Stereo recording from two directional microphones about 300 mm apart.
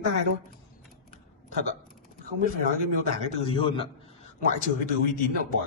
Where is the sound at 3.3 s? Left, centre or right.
Centre.